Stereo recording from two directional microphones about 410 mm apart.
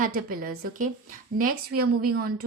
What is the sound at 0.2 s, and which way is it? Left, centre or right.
A woman's voice, right.